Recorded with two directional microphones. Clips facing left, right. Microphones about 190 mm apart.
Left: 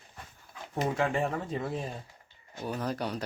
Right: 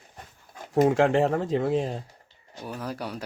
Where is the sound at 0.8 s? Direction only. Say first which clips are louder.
Right 7 dB; 80° right.